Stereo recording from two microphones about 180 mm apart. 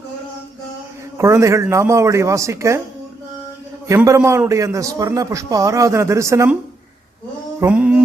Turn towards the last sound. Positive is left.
turn(degrees=-5)  # may be behind; listen again after turning